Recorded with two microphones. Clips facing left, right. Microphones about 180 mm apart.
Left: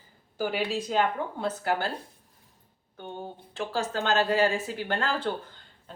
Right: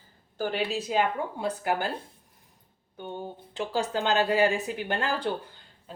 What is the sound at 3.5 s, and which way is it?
Speech, 15° right (ahead or behind).